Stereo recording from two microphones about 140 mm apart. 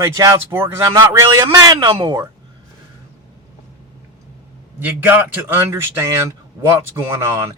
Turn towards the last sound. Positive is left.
turn(degrees=-25)  # may be behind; listen again after turning